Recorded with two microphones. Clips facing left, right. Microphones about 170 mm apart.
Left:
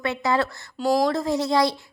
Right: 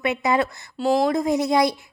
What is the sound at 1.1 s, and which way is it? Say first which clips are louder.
Speech: right 2 dB; 20° right (ahead or behind).